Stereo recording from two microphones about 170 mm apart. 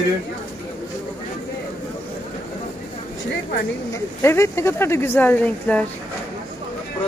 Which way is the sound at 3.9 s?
15° left (ahead or behind).